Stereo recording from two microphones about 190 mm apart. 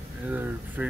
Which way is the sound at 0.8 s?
10° right (ahead or behind).